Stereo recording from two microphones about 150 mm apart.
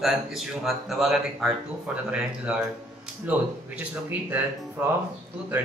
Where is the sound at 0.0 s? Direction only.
Centre (ahead or behind).